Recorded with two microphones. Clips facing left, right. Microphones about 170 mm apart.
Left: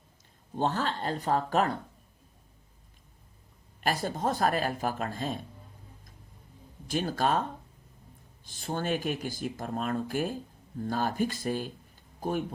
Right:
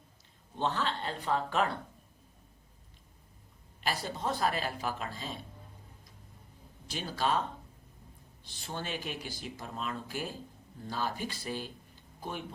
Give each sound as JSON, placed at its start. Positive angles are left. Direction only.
{"t": 0.5, "sound": "speech", "side_deg": 45}
{"t": 3.8, "sound": "speech", "side_deg": 50}
{"t": 6.8, "sound": "speech", "side_deg": 50}
{"t": 8.4, "sound": "speech", "side_deg": 50}